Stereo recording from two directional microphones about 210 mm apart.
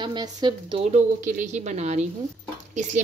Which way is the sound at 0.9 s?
40° right (ahead or behind).